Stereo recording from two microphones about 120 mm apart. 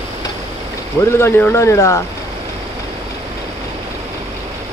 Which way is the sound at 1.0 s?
20° left (ahead or behind).